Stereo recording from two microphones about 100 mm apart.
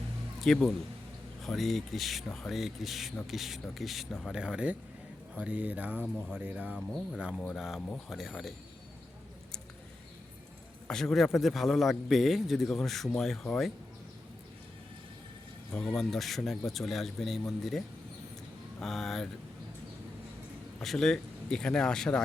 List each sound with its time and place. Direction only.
0.4 s a man's voice: 5° left (ahead or behind); by 6.1 s 15° right (ahead or behind)
6.1 s a man's voice: 5° left (ahead or behind)
6.4 s speech: 15° right (ahead or behind)
7.3 s a man's voice: centre (ahead or behind)
10.8 s a man's voice: 5° left (ahead or behind)
15.7 s a man's voice: 5° left (ahead or behind)
20.8 s speech: 5° left (ahead or behind)